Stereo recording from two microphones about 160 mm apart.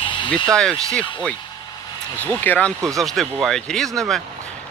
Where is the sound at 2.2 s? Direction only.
10° left (ahead or behind).